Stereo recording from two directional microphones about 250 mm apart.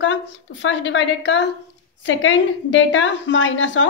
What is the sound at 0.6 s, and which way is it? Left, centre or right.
A woman's voice, left.